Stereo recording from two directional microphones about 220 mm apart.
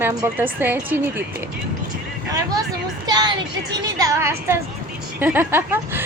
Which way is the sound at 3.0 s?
20° right (ahead or behind).